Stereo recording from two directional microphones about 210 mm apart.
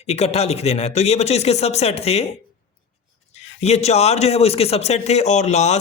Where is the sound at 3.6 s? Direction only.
30° left (ahead or behind).